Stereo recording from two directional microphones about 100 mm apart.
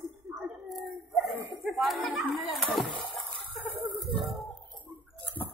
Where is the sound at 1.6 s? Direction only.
Centre (ahead or behind).